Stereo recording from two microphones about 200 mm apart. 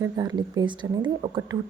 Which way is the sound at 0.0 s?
20° right (ahead or behind).